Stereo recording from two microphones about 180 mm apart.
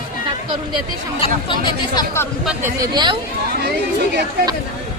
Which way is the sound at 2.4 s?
10° right (ahead or behind).